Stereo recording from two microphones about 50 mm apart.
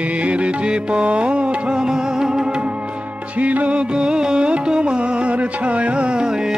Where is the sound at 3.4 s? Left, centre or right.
Right.